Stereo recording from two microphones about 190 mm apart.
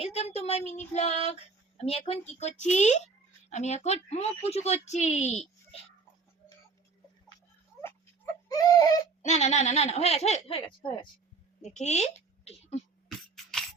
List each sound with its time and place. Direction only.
0.0 s speech: 35° left (ahead or behind)
8.4 s a sound: 20° left (ahead or behind)
9.2 s a woman's voice: 35° left (ahead or behind)
13.1 s beatboxing: centre (ahead or behind)